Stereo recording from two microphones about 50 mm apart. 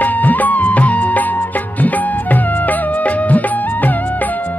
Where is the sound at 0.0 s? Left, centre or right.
Left.